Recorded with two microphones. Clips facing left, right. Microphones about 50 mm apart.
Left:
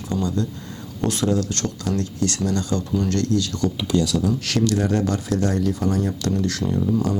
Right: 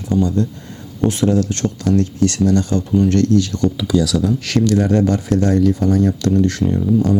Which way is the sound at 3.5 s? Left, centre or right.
Left.